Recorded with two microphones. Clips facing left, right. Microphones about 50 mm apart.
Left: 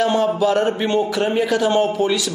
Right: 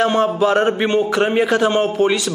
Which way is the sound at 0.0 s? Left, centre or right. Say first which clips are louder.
Right 1 dB; right.